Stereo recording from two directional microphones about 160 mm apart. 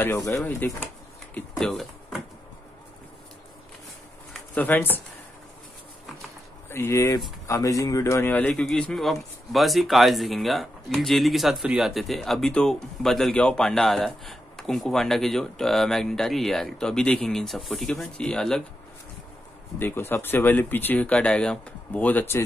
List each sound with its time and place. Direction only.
0.0 s speech: 10° left (ahead or behind)
1.6 s a sound: centre (ahead or behind)
4.3 s speech: 10° left (ahead or behind)
6.7 s speech: 15° left (ahead or behind)
19.8 s speech: 15° left (ahead or behind)